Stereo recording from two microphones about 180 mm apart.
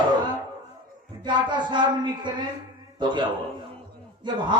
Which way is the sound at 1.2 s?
25° right (ahead or behind).